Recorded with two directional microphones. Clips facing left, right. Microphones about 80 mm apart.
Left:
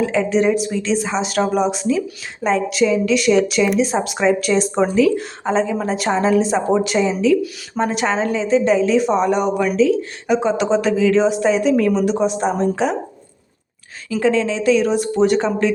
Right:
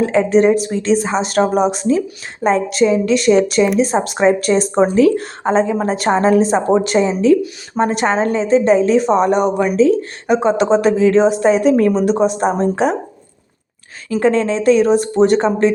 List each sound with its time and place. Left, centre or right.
0.0 s a woman's voice: right
14.1 s speech: right